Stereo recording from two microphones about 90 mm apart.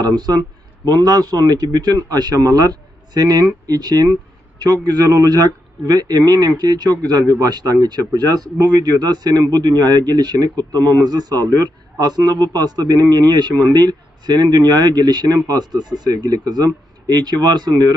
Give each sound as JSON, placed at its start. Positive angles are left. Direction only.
{"t": 0.2, "sound": "a man's voice", "side_deg": -50}